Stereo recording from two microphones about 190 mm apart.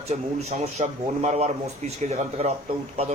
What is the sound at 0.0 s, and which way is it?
Speech, 35° right (ahead or behind).